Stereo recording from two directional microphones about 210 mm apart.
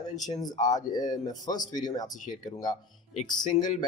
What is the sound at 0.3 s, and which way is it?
Speech, 20° left (ahead or behind).